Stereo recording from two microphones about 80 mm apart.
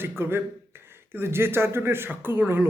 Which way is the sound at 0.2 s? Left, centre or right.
Right.